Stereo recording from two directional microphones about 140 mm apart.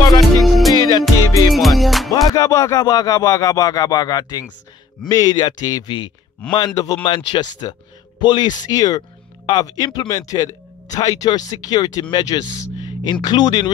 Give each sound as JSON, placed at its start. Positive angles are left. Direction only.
{"t": 0.2, "sound": "music", "side_deg": 0}
{"t": 0.7, "sound": "music", "side_deg": 30}
{"t": 1.5, "sound": "music", "side_deg": 0}
{"t": 2.2, "sound": "speech", "side_deg": 25}